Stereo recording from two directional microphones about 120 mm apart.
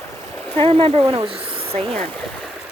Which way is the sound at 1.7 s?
60° right (ahead or behind).